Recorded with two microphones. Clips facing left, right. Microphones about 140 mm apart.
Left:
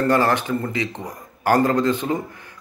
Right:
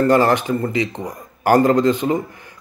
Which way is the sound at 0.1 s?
15° right (ahead or behind).